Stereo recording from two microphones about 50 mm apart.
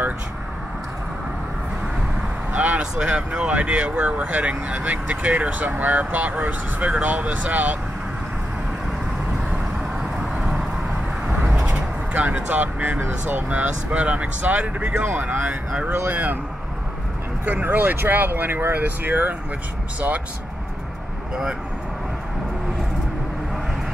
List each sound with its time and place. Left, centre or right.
2.5 s vehicle: right
2.8 s speech: centre
11.7 s vehicle: right
12.4 s speech: right
15.1 s speech: right
17.5 s speech: right